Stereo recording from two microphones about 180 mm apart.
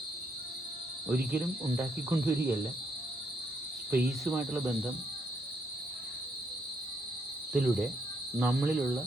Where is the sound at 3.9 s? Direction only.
10° right (ahead or behind).